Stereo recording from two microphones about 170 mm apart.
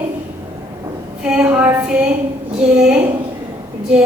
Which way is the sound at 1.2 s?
5° right (ahead or behind).